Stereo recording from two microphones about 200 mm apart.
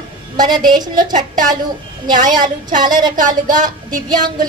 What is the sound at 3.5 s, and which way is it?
Speech, 40° right (ahead or behind).